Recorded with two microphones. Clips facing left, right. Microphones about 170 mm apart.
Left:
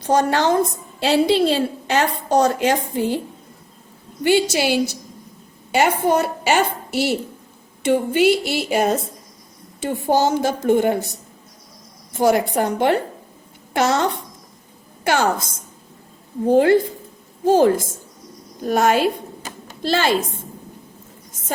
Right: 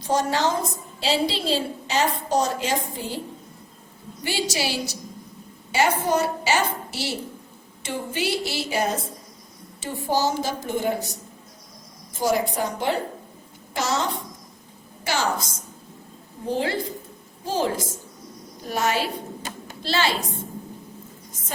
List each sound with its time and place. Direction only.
0.1 s a woman's voice: 60° left (ahead or behind)
4.3 s a woman's voice: 55° left (ahead or behind)
12.2 s a woman's voice: 60° left (ahead or behind)
16.5 s a woman's voice: 55° left (ahead or behind)